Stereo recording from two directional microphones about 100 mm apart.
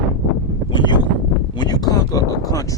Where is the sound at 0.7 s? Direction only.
50° left (ahead or behind).